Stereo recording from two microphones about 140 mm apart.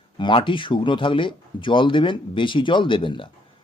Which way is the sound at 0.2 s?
35° left (ahead or behind).